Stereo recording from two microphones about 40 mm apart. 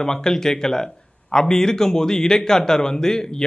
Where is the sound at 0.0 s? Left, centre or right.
Centre.